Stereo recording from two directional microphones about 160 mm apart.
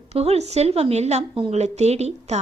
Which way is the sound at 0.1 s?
40° right (ahead or behind).